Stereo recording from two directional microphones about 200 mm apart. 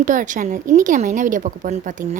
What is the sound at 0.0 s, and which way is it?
Speech, 40° right (ahead or behind).